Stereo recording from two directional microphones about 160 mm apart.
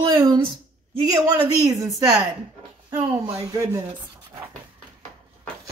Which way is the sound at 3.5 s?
20° right (ahead or behind).